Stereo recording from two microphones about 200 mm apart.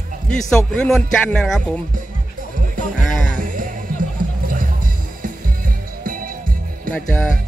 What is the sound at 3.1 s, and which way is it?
Music, centre (ahead or behind).